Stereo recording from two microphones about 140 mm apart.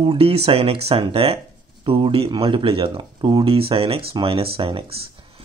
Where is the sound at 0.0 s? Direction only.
40° right (ahead or behind).